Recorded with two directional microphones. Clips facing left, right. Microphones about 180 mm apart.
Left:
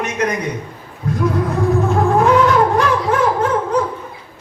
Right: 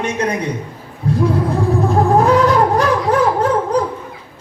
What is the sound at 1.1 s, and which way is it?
Music, 30° right (ahead or behind).